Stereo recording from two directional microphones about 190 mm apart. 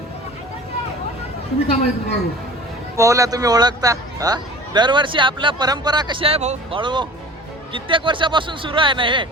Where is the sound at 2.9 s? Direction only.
15° right (ahead or behind).